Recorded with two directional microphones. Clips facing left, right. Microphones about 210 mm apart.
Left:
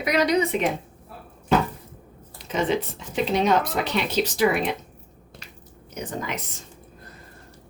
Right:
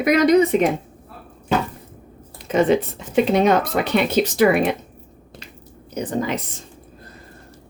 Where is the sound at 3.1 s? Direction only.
55° right (ahead or behind).